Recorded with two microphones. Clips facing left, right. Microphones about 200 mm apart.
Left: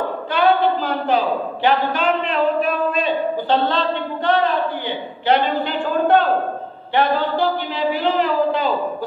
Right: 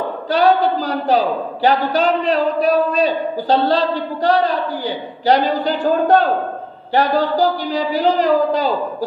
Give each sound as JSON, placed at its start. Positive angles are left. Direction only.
{"t": 0.3, "sound": "a woman's voice", "side_deg": -40}